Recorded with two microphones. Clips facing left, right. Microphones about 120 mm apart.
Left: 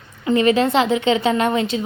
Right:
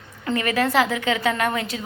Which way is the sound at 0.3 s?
25° left (ahead or behind).